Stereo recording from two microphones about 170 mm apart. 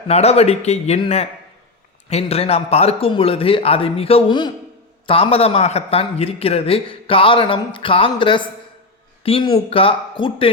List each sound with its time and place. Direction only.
0.1 s a man's voice: 40° left (ahead or behind)